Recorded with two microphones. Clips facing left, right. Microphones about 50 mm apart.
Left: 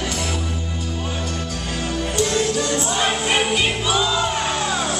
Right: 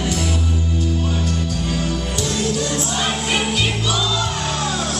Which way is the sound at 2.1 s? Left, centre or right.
Centre.